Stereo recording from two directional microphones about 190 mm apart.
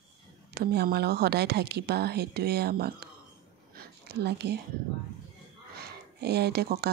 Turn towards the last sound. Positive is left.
turn(degrees=-60)  # may be behind; listen again after turning